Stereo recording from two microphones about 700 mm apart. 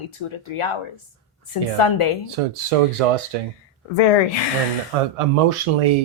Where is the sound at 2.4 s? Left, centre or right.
Right.